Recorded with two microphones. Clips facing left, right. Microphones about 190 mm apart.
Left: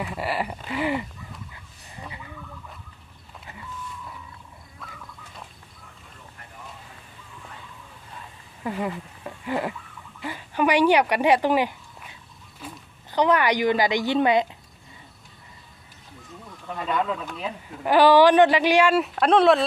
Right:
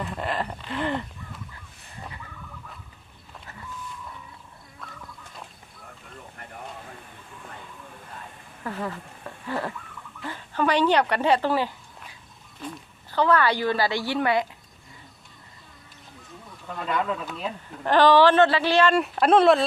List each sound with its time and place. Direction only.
0.0 s a woman's voice: 5° left (ahead or behind)
8.6 s a woman's voice: 15° left (ahead or behind)
12.6 s a sound: 5° left (ahead or behind)
13.1 s a woman's voice: 15° left (ahead or behind)
16.7 s speech: centre (ahead or behind)